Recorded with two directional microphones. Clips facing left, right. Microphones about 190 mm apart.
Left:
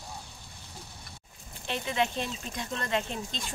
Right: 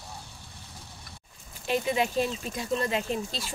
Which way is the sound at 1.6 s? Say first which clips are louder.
Right 4 dB; 10° right (ahead or behind).